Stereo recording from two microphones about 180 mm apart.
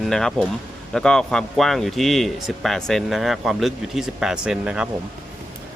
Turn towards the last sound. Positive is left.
turn(degrees=-5)  # may be behind; listen again after turning